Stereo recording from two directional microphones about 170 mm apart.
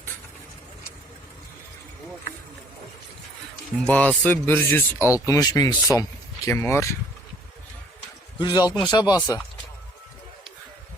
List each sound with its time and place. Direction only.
3.8 s speech: 10° left (ahead or behind)
8.4 s speech: 25° left (ahead or behind)